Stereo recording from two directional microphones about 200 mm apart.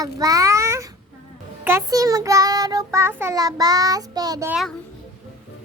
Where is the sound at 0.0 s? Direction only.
20° right (ahead or behind).